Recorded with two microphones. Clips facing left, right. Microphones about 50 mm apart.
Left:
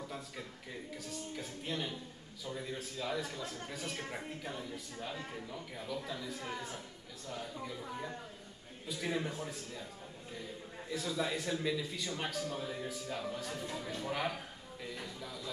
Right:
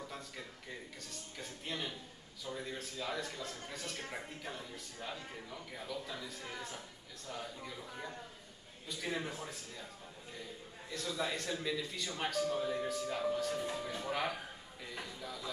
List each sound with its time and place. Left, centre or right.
1.0 s a man's voice: centre
10.9 s a man's voice: centre
13.6 s speech: centre
14.0 s a man's voice: centre
15.0 s a sound: centre